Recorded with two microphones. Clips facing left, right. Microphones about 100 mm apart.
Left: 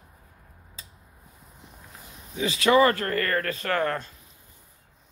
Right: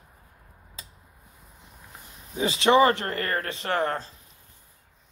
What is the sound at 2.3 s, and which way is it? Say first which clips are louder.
Speech: right 1 dB; 30° right (ahead or behind).